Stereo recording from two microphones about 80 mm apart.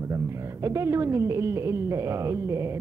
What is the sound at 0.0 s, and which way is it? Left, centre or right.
A woman's voice, right.